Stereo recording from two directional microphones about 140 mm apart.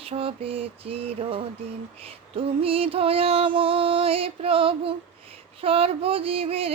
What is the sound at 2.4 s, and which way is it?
Music, 40° right (ahead or behind).